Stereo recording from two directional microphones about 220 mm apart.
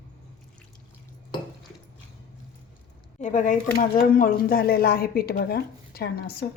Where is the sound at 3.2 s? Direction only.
35° left (ahead or behind).